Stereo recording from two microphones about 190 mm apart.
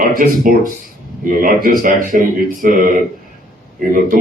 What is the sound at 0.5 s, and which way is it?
Speech, 50° right (ahead or behind).